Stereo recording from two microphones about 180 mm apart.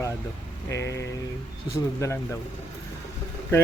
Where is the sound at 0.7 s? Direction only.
15° left (ahead or behind).